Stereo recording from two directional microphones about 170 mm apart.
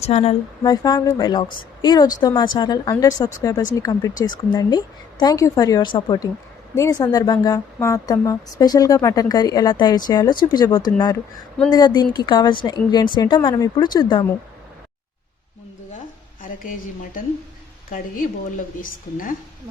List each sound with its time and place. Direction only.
0.0 s speech: 35° left (ahead or behind)
0.6 s a woman's voice: 25° left (ahead or behind)
16.4 s a woman's voice: 55° left (ahead or behind)
18.8 s a woman's voice: 55° left (ahead or behind)